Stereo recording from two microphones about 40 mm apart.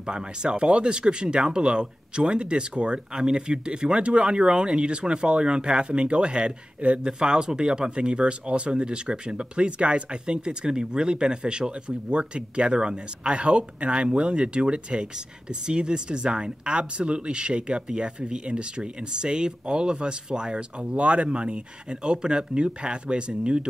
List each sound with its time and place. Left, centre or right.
0.0 s speech: right
20.9 s speech: right